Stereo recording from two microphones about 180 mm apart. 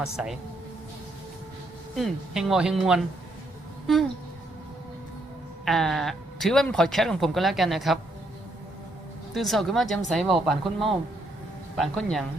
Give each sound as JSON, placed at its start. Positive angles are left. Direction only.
{"t": 0.0, "sound": "speech", "side_deg": -5}
{"t": 2.0, "sound": "speech", "side_deg": 0}
{"t": 5.6, "sound": "speech", "side_deg": 0}
{"t": 9.3, "sound": "speech", "side_deg": 0}